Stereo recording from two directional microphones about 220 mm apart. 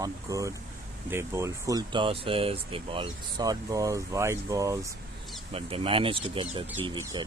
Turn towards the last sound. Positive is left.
turn(degrees=-20)  # may be behind; listen again after turning